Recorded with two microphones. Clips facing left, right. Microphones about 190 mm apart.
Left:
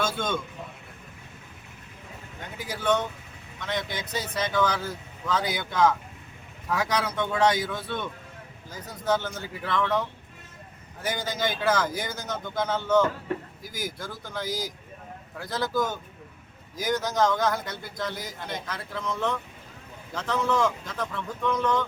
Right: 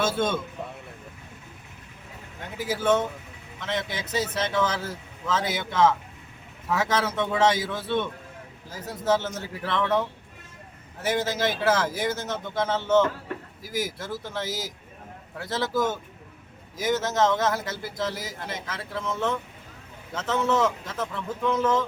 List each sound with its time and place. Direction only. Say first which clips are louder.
0.2 s speech: right 4 dB; 5° right (ahead or behind)
2.6 s speech: right 3 dB; centre (ahead or behind)
12.8 s a man's voice: right 1 dB; 25° right (ahead or behind)
13.6 s speech: right 4 dB; centre (ahead or behind)